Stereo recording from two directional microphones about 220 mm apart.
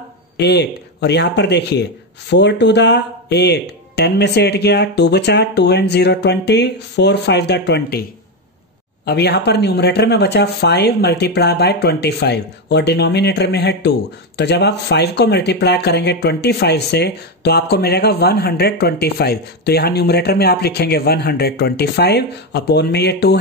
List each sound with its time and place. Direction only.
0.4 s speech: 50° left (ahead or behind)
9.0 s speech: 50° left (ahead or behind)